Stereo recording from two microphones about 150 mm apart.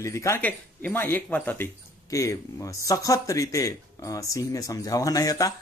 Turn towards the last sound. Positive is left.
turn(degrees=25)  # may be behind; listen again after turning